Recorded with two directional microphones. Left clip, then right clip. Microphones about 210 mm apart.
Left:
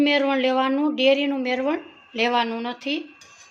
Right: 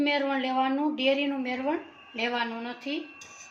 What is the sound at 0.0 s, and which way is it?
Speech, 45° left (ahead or behind).